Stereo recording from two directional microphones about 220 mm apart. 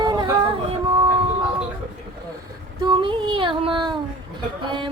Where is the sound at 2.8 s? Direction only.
20° right (ahead or behind).